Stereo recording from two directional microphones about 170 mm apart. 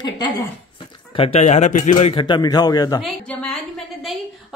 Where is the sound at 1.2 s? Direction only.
40° left (ahead or behind).